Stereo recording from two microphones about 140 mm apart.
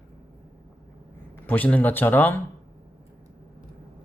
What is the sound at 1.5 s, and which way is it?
Speech, 10° left (ahead or behind).